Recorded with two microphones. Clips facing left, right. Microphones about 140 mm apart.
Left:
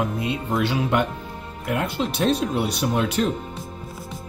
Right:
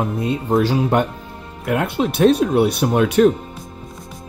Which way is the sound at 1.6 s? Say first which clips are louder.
Right 5 dB; 60° right (ahead or behind).